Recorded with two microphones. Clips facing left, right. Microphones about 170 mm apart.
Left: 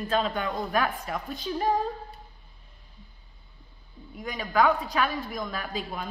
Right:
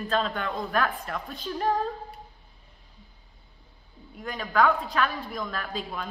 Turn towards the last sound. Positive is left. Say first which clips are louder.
# even
turn(degrees=5)  # may be behind; listen again after turning